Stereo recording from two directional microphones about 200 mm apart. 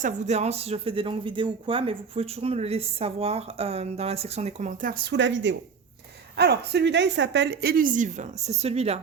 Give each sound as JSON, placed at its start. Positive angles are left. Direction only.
{"t": 0.0, "sound": "speech", "side_deg": -35}
{"t": 5.1, "sound": "speech", "side_deg": -65}